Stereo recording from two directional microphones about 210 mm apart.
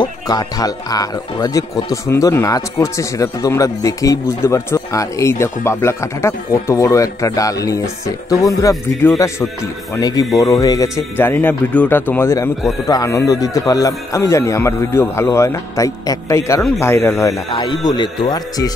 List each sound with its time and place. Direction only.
0.0 s speech: 20° left (ahead or behind)